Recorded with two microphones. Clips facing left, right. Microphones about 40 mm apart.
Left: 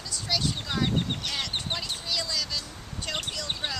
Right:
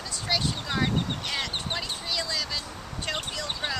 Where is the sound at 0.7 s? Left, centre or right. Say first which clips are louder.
Right 1 dB; centre.